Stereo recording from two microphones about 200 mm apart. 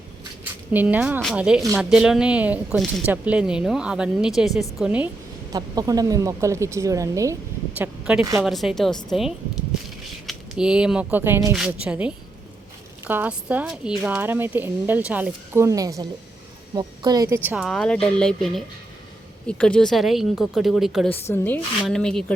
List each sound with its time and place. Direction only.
0.7 s speech: 10° right (ahead or behind)
5.5 s speech: 20° right (ahead or behind)
7.8 s speech: 5° right (ahead or behind)